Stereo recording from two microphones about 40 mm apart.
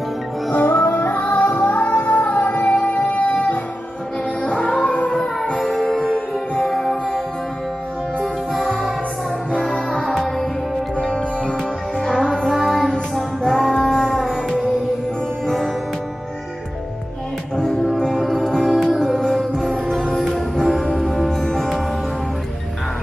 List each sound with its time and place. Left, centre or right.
0.5 s music: left
4.4 s music: left
5.1 s music: centre
6.1 s music: left
6.7 s music: centre
8.5 s music: centre
11.0 s music: centre
12.5 s music: centre
15.4 s music: centre
18.0 s music: centre